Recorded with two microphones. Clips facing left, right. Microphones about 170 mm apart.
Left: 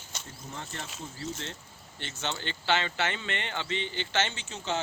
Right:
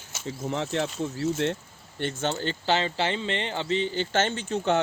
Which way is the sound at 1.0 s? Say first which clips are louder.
Right 10 dB; 65° right (ahead or behind).